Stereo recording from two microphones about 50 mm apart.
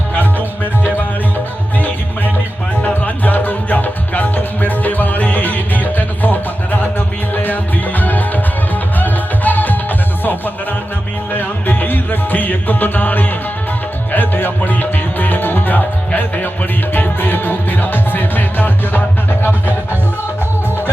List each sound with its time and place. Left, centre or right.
2.8 s music: left
11.3 s music: left